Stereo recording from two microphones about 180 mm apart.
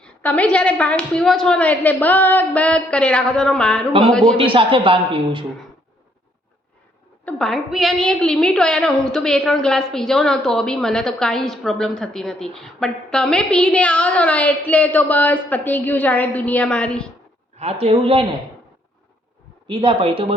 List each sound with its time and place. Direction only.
0.0 s a woman's voice: 10° left (ahead or behind)
4.4 s a man's voice: 30° right (ahead or behind)
7.3 s a woman's voice: 5° left (ahead or behind)
17.6 s speech: 35° right (ahead or behind)
19.6 s a man's voice: 25° right (ahead or behind)